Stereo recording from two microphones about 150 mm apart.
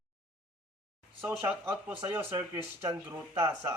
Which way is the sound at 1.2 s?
10° right (ahead or behind).